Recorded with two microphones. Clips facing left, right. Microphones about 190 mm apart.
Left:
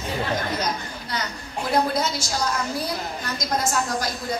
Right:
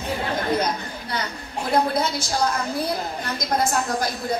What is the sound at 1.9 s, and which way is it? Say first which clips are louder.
Speech: right 2 dB; 55° right (ahead or behind).